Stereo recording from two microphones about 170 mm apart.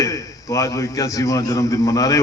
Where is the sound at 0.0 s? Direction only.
20° left (ahead or behind).